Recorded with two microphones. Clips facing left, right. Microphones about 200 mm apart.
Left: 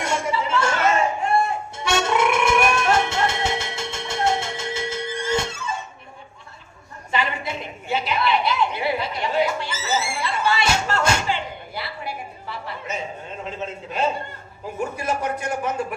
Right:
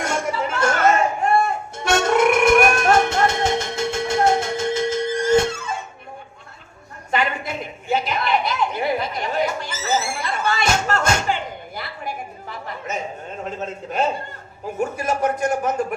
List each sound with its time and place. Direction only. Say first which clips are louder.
0.0 s chatter: right 1 dB; 50° right (ahead or behind)
1.8 s music: right 4 dB; 50° right (ahead or behind)
7.1 s a sound: right 2 dB; 50° right (ahead or behind)